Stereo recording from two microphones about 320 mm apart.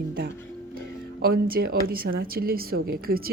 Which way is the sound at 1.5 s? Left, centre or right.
Right.